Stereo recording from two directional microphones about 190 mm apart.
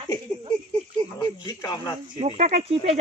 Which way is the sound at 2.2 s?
35° right (ahead or behind).